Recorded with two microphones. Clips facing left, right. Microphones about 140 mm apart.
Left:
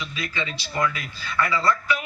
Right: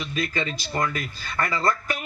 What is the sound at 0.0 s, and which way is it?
Speech, 50° right (ahead or behind).